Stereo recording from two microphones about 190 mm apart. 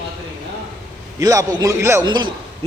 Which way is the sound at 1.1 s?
20° right (ahead or behind).